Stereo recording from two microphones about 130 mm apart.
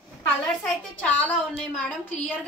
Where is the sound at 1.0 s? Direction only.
10° left (ahead or behind).